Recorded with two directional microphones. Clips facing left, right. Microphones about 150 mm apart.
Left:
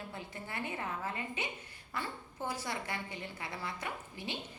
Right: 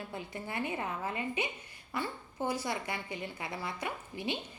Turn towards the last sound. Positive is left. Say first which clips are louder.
# right 5 dB
turn(degrees=-15)  # may be behind; listen again after turning